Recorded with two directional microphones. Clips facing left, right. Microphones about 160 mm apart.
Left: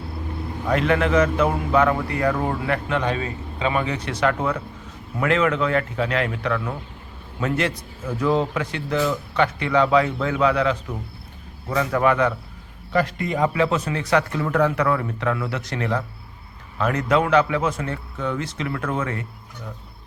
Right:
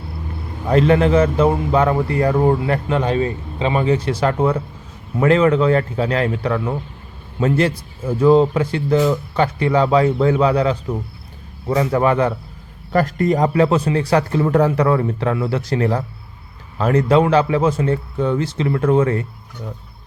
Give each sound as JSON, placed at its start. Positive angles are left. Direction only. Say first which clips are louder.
{"t": 0.7, "sound": "a man's voice", "louder": "right 6 dB", "side_deg": -30}
{"t": 12.9, "sound": "a man's voice", "louder": "right 6 dB", "side_deg": -45}